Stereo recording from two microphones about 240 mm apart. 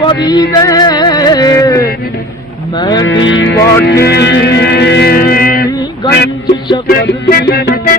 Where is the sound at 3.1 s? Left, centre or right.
Left.